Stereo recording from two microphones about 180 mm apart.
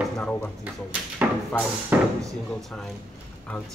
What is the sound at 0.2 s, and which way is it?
Speech, 5° left (ahead or behind).